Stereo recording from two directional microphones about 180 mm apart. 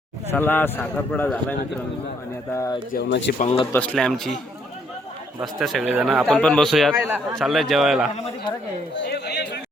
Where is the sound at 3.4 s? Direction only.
40° left (ahead or behind).